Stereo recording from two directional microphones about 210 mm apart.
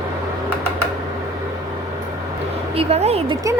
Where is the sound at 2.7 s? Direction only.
30° right (ahead or behind).